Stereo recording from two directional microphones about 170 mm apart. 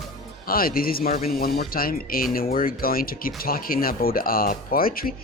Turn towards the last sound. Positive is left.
turn(degrees=60)  # may be behind; listen again after turning